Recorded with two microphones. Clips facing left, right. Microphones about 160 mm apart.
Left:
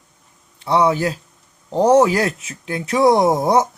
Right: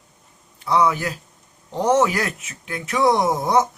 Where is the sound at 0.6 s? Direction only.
30° left (ahead or behind).